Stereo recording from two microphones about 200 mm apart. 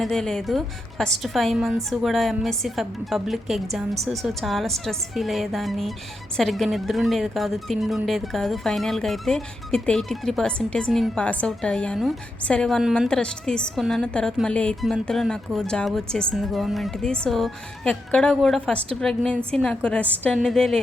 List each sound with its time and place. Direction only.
0.0 s speech: 5° left (ahead or behind)